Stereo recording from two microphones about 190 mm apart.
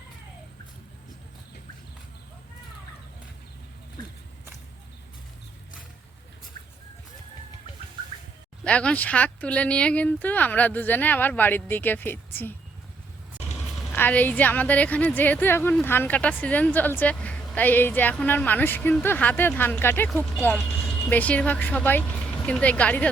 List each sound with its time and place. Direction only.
8.6 s a woman's voice: 5° left (ahead or behind)
13.9 s a woman's voice: 10° left (ahead or behind)